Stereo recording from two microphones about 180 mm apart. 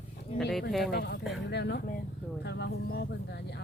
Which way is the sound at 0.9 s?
65° left (ahead or behind).